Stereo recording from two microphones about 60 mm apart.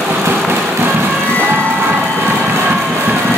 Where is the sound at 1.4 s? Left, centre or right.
Right.